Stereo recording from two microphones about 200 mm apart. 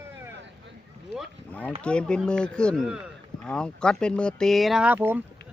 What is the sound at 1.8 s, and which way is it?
Speech, 5° left (ahead or behind).